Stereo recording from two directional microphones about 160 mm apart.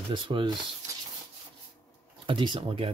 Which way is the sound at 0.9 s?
20° right (ahead or behind).